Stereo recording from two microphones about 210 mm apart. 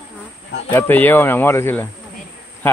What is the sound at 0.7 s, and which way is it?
Speech, 10° left (ahead or behind).